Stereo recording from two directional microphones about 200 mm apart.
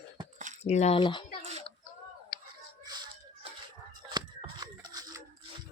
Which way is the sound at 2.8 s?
20° right (ahead or behind).